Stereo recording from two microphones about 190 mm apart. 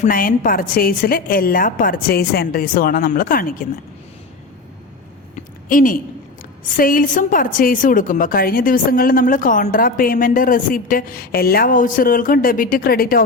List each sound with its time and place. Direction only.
0.0 s a woman's voice: 50° left (ahead or behind)
5.6 s a woman's voice: 45° left (ahead or behind)